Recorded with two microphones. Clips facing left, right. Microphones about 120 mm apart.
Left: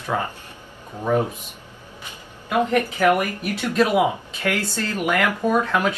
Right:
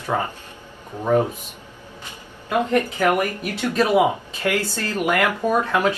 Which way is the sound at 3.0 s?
15° right (ahead or behind).